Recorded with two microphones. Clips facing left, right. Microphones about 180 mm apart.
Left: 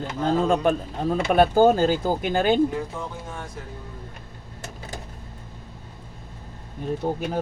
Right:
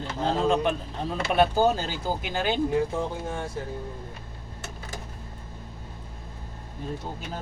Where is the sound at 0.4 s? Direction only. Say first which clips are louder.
Left 3 dB; 45° left (ahead or behind).